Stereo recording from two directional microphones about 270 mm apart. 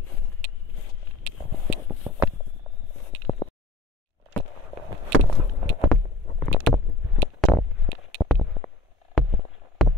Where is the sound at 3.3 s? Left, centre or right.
Centre.